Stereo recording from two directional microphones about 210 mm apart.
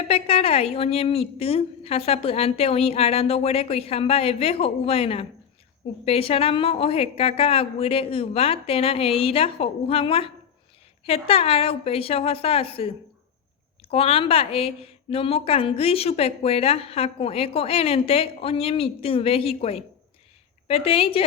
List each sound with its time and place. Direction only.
0.1 s a woman's voice: 25° left (ahead or behind)
13.9 s a woman's voice: 25° left (ahead or behind)